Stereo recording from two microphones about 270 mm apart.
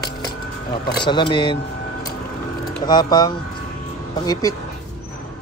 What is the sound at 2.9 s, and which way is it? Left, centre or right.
Speech, centre.